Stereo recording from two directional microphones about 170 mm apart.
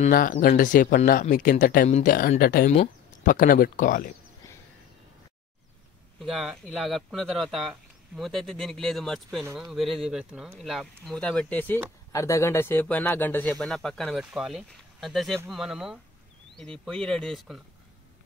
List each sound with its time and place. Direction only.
0.1 s speech: 55° left (ahead or behind)
1.9 s speech: 40° left (ahead or behind)
2.1 s speech: 60° left (ahead or behind)
2.7 s speech: 45° left (ahead or behind)
6.1 s speech: centre (ahead or behind)